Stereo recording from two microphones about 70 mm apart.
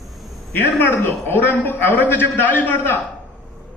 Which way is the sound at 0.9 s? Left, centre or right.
Left.